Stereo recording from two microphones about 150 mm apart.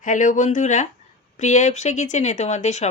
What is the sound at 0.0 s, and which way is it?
A woman's voice, 60° left (ahead or behind).